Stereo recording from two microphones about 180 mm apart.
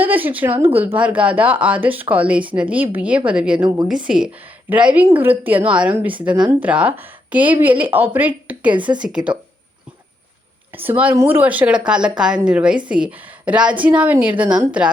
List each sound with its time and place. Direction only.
0.0 s a woman's voice: 10° right (ahead or behind)
8.7 s speech: 25° right (ahead or behind)
9.0 s speech: 5° right (ahead or behind)
10.8 s a woman's voice: 10° right (ahead or behind)